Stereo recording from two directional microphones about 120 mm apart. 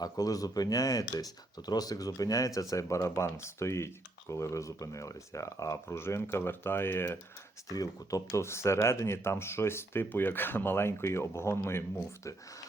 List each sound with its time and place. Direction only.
0.0 s speech: 30° left (ahead or behind)